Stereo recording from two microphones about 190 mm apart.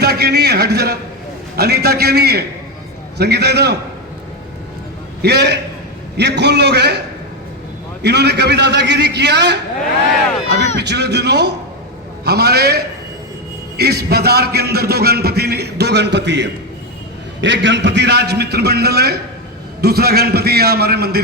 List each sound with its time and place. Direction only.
0.0 s a man's voice: 60° right (ahead or behind)
5.2 s a man's voice: 60° right (ahead or behind)
8.0 s a man's voice: 60° right (ahead or behind)
10.8 s a man's voice: 60° right (ahead or behind)